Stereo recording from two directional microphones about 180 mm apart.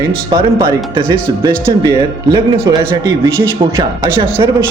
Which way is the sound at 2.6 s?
20° right (ahead or behind).